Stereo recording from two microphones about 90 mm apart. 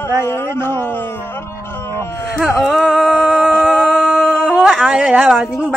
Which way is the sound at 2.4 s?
Centre (ahead or behind).